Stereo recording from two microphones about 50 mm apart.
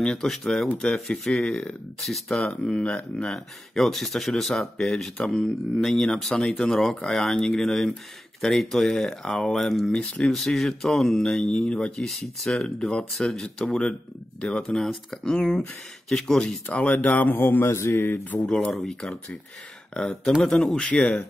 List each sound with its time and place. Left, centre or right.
0.0 s speech: centre
2.0 s speech: centre
2.8 s speech: left
3.3 s speech: centre
16.6 s speech: left
17.4 s speech: left
17.6 s speech: left
18.9 s speech: centre